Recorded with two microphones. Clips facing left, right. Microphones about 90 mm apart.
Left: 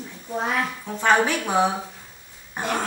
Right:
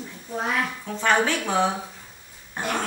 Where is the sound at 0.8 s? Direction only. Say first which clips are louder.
Left 3 dB; 15° left (ahead or behind).